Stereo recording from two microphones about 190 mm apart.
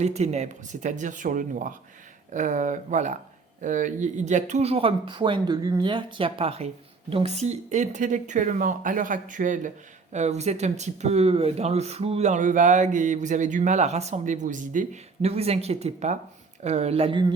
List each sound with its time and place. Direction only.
0.0 s speech: 35° right (ahead or behind)